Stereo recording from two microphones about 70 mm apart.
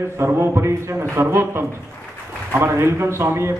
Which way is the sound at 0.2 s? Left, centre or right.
Right.